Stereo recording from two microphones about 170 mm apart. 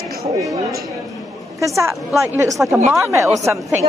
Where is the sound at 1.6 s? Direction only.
20° right (ahead or behind).